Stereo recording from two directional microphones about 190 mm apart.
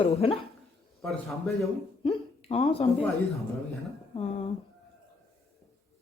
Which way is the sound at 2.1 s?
30° left (ahead or behind).